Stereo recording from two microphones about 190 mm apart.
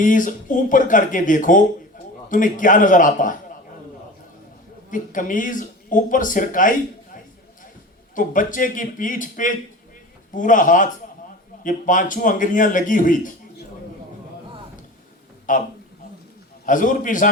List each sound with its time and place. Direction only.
0.0 s a man's voice: 45° left (ahead or behind)
4.9 s a man's voice: 45° left (ahead or behind)
15.5 s a man's voice: 45° left (ahead or behind)
16.6 s a man's voice: 45° left (ahead or behind)